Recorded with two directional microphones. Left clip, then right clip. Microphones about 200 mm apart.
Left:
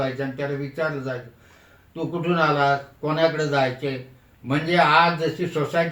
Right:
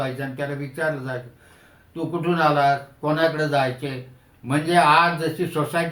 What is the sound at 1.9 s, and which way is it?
Speech, 15° right (ahead or behind).